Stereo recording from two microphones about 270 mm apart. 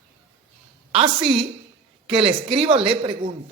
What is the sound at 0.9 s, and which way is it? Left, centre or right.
Speech, centre.